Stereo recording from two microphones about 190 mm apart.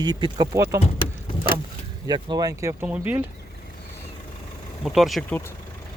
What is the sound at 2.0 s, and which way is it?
Speech, 25° right (ahead or behind).